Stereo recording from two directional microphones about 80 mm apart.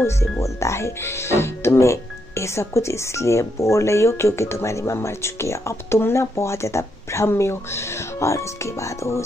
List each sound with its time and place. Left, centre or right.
0.0 s speech: left